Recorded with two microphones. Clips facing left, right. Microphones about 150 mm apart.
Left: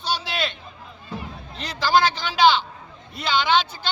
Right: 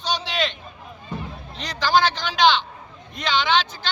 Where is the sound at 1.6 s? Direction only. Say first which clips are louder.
Even; 10° left (ahead or behind).